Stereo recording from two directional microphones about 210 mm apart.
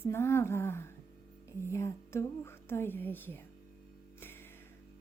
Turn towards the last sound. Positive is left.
turn(degrees=10)  # may be behind; listen again after turning